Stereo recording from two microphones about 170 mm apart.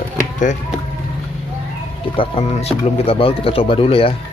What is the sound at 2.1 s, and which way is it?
Speech, 30° left (ahead or behind).